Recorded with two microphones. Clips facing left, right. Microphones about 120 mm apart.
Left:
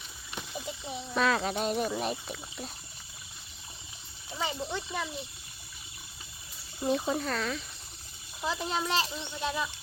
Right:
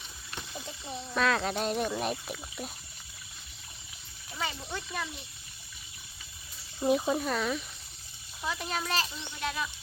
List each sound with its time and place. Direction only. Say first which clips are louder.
0.3 s speech: left 3 dB; 10° left (ahead or behind)
4.4 s speech: left 3 dB; 20° left (ahead or behind)
6.8 s speech: right 2 dB; 10° right (ahead or behind)
8.4 s speech: left 2 dB; 25° left (ahead or behind)